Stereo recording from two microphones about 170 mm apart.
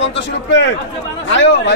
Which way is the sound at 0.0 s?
90° left.